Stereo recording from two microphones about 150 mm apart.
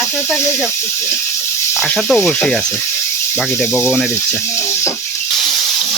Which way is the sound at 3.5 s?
15° left (ahead or behind).